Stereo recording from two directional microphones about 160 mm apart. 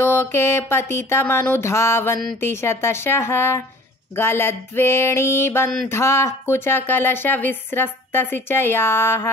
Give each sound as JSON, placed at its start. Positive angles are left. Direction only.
{"t": 0.0, "sound": "speech", "side_deg": 15}